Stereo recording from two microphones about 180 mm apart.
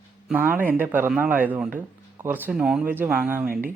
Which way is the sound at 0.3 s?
10° right (ahead or behind).